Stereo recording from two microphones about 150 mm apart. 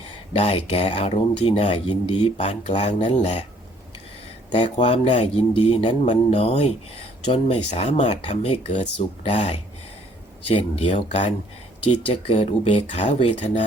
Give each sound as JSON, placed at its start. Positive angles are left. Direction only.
{"t": 0.3, "sound": "speech", "side_deg": 40}
{"t": 4.5, "sound": "speech", "side_deg": 35}
{"t": 13.4, "sound": "speech", "side_deg": 55}